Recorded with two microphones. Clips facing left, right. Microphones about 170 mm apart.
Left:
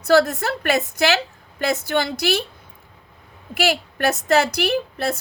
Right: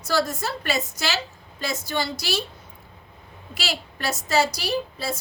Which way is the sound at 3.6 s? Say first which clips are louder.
Left 10 dB; 55° left (ahead or behind).